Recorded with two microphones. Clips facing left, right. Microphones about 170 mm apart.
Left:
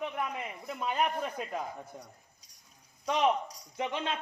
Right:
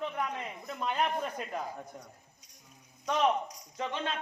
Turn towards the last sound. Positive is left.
turn(degrees=15)  # may be behind; listen again after turning